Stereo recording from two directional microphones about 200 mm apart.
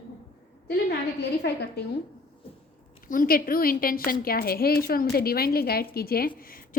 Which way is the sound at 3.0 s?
45° left (ahead or behind).